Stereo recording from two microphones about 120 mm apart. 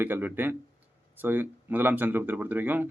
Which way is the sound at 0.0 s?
15° right (ahead or behind).